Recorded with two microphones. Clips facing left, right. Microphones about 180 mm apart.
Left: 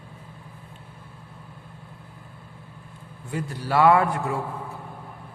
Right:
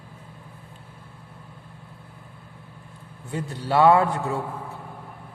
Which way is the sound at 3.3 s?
25° right (ahead or behind).